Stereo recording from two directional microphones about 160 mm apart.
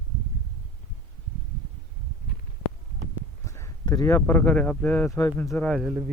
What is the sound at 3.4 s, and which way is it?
Speech, 20° left (ahead or behind).